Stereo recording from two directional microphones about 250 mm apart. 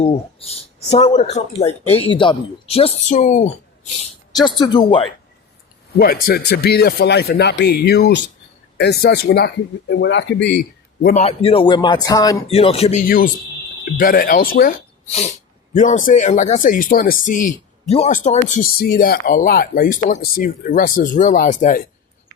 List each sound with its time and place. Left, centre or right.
0.0 s speech: left
4.4 s speech: centre
6.2 s speech: left